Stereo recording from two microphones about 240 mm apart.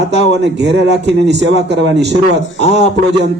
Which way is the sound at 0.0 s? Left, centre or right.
Right.